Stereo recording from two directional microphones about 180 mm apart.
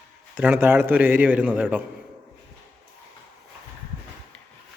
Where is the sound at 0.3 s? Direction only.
10° right (ahead or behind).